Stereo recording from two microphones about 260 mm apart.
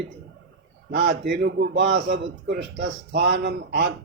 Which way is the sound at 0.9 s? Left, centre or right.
Right.